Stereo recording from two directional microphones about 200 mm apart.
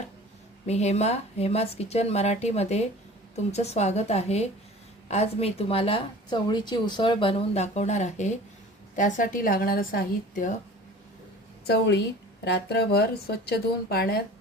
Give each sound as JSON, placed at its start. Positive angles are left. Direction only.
{"t": 0.7, "sound": "a woman's voice", "side_deg": 35}
{"t": 11.6, "sound": "a woman's voice", "side_deg": 55}